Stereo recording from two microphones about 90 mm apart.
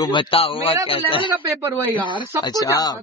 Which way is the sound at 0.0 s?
60° left (ahead or behind).